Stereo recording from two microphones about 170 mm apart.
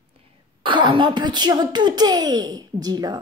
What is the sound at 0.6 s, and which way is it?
Speech, 30° right (ahead or behind).